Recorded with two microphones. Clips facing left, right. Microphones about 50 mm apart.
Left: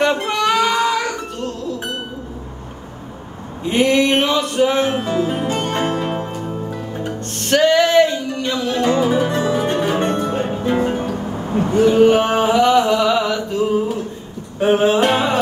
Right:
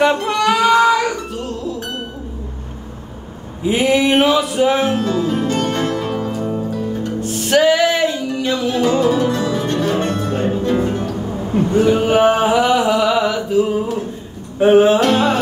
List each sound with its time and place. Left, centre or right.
0.2 s music: centre
3.6 s a sound: centre
4.9 s music: centre
7.2 s music: centre
8.9 s music: centre
11.7 s a sound: centre
14.6 s music: centre
15.0 s music: centre